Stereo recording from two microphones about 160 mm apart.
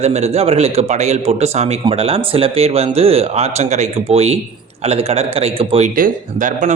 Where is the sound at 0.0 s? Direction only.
40° right (ahead or behind).